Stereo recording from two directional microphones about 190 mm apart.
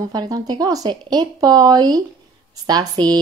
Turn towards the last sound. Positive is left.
turn(degrees=-20)  # may be behind; listen again after turning